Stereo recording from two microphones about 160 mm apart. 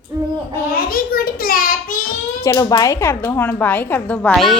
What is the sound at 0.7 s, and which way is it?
A child's voice, 65° left (ahead or behind).